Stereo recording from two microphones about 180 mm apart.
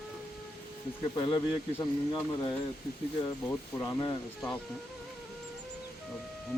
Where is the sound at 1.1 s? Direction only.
25° left (ahead or behind).